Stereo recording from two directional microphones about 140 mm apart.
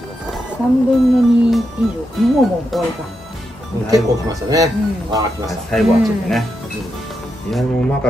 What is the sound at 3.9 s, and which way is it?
Speech, 25° right (ahead or behind).